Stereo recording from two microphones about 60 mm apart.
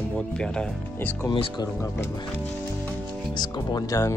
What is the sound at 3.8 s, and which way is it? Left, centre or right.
Speech, left.